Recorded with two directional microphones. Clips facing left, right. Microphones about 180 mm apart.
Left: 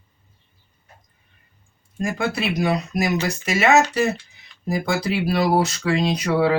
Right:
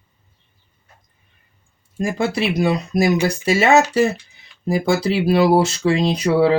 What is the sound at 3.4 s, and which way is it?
Speech, 30° right (ahead or behind).